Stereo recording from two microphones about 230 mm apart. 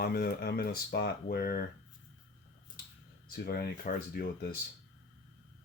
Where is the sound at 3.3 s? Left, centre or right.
Left.